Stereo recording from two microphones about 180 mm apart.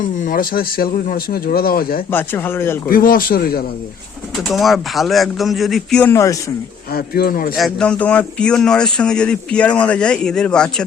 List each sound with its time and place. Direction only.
0.2 s speech: 50° left (ahead or behind)
2.0 s speech: 10° left (ahead or behind)
2.9 s speech: 50° left (ahead or behind)
4.4 s speech: centre (ahead or behind)
6.9 s speech: 60° left (ahead or behind)
7.5 s speech: centre (ahead or behind)